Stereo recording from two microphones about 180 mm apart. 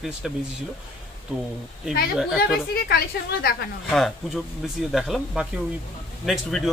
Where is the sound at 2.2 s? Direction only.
Centre (ahead or behind).